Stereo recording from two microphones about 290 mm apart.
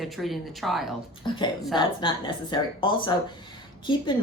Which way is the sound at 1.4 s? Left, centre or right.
Centre.